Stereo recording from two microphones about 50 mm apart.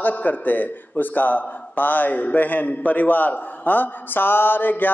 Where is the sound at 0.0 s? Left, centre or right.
Left.